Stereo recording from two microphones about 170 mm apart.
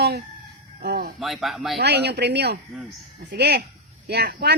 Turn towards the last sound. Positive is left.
turn(degrees=-70)  # may be behind; listen again after turning